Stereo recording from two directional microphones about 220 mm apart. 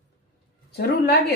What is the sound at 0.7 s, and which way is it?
Speech, 50° left (ahead or behind).